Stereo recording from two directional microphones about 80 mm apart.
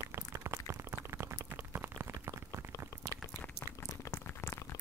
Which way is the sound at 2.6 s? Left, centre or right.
Right.